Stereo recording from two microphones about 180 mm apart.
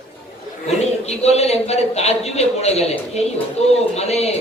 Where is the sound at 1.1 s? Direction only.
35° left (ahead or behind).